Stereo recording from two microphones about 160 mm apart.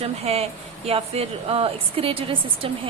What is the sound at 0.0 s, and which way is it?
A woman's voice, 40° right (ahead or behind).